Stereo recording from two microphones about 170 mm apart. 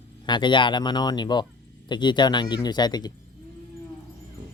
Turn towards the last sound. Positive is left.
turn(degrees=25)  # may be behind; listen again after turning